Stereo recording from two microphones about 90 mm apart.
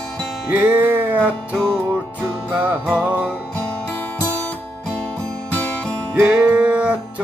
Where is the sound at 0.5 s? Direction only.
20° right (ahead or behind).